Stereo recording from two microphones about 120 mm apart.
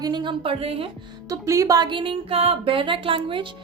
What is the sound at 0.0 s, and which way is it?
Speech, 40° right (ahead or behind).